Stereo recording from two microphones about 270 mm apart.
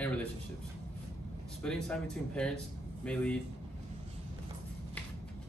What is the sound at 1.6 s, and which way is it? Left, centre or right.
Speech, centre.